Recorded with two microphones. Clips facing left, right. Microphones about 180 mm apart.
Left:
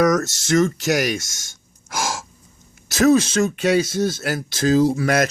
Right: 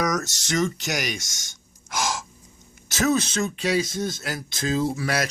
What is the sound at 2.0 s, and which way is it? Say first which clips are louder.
Gasp: left 2 dB; 45° left (ahead or behind).